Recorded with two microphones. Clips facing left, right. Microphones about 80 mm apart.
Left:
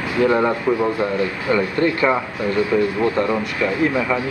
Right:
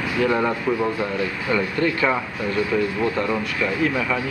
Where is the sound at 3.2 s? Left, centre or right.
Centre.